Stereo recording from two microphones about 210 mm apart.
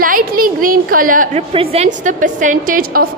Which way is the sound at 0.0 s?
40° right (ahead or behind).